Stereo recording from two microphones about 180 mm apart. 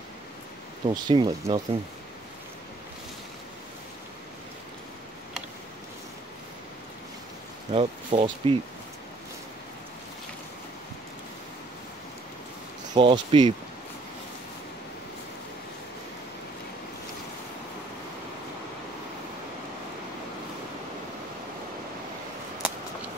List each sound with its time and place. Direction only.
0.8 s speech: 25° right (ahead or behind)
7.7 s speech: 35° right (ahead or behind)
12.9 s speech: 25° right (ahead or behind)